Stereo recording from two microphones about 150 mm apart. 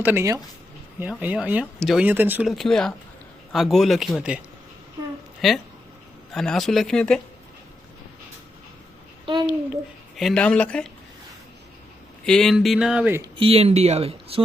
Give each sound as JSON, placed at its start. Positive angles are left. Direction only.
{"t": 0.0, "sound": "speech", "side_deg": -15}
{"t": 2.0, "sound": "speech", "side_deg": -10}
{"t": 2.5, "sound": "speech", "side_deg": 0}
{"t": 5.4, "sound": "speech", "side_deg": 0}
{"t": 9.2, "sound": "a child's voice", "side_deg": -30}
{"t": 10.2, "sound": "speech", "side_deg": 5}
{"t": 12.2, "sound": "speech", "side_deg": 5}
{"t": 13.3, "sound": "speech", "side_deg": -40}